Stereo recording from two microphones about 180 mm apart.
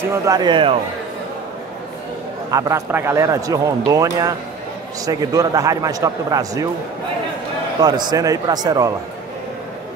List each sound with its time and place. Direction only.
0.1 s speech: 20° right (ahead or behind)
2.5 s speech: 15° right (ahead or behind)
7.8 s speech: 20° right (ahead or behind)